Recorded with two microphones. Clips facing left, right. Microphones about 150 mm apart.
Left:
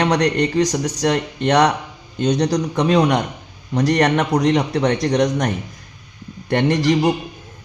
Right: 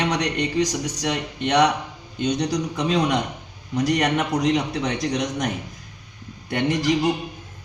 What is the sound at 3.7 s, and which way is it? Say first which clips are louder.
A man's voice: left 5 dB; 80° left.